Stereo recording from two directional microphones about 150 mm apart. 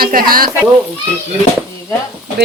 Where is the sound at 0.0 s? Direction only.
75° right (ahead or behind).